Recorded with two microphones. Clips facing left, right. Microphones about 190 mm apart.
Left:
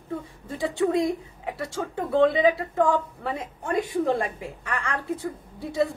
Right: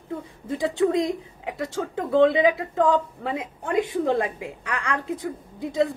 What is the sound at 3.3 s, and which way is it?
A woman's voice, 15° right (ahead or behind).